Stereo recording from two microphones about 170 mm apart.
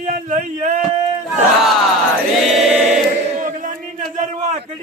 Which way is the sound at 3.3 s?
50° right (ahead or behind).